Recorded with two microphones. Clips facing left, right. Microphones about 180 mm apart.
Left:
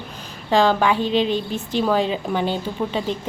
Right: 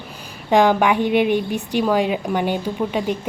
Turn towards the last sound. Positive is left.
turn(degrees=-10)  # may be behind; listen again after turning